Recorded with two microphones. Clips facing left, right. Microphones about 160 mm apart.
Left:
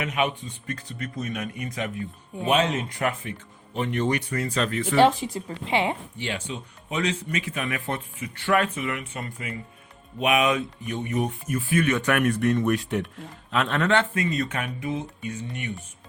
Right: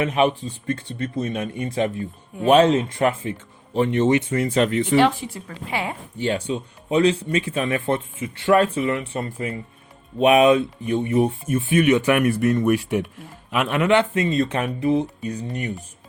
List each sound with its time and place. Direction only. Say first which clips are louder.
0.0 s speech: right 7 dB; 30° right (ahead or behind)
4.9 s speech: left 1 dB; 40° left (ahead or behind)
5.5 s a woman's voice: left 3 dB; 25° left (ahead or behind)
6.1 s speech: right 8 dB; 40° right (ahead or behind); by 12.0 s 20° right (ahead or behind)
12.0 s speech: right 4 dB; 5° right (ahead or behind); by 15.7 s 40° right (ahead or behind)